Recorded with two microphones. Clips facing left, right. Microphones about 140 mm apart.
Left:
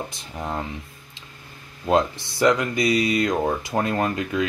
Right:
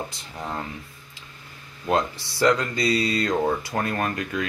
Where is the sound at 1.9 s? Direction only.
20° left (ahead or behind).